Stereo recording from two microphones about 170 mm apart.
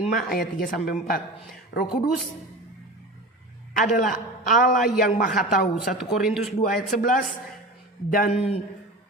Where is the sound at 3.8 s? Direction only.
50° left (ahead or behind).